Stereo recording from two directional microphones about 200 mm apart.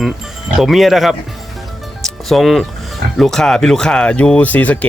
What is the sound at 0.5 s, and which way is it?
Speech, centre (ahead or behind).